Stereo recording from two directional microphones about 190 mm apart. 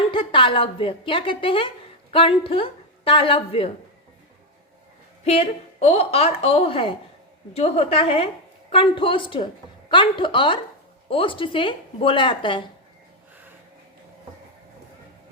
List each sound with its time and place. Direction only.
0.1 s a woman's voice: 25° left (ahead or behind)
5.2 s a woman's voice: 35° left (ahead or behind)